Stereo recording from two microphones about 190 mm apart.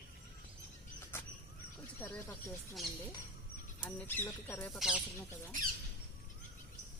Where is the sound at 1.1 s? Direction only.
10° left (ahead or behind).